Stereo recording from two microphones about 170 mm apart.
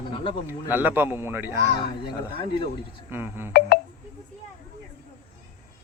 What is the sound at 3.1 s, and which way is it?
Speech, 15° right (ahead or behind).